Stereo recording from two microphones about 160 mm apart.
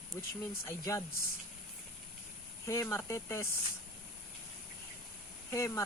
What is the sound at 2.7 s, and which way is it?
Speech, 15° left (ahead or behind).